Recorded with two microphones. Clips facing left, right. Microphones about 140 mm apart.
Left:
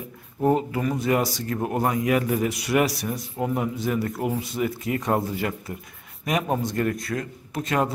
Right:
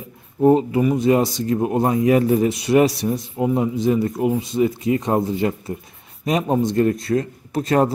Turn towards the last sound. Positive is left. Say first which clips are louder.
# right 7 dB
turn(degrees=-35)  # may be behind; listen again after turning